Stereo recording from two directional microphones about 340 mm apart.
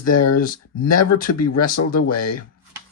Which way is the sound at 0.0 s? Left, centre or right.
Left.